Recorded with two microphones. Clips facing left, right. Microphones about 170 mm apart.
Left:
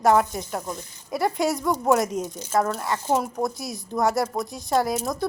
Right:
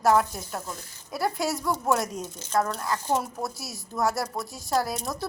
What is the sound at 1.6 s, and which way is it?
Speech, 15° left (ahead or behind).